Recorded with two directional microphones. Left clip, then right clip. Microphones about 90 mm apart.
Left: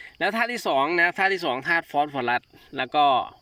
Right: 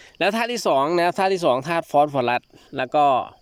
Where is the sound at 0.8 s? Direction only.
40° right (ahead or behind).